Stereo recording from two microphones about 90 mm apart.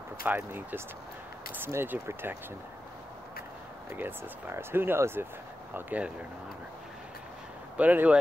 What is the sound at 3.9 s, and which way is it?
Speech, 25° right (ahead or behind).